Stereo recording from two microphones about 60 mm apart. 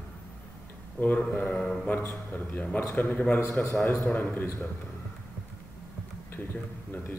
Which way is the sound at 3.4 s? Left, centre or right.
Left.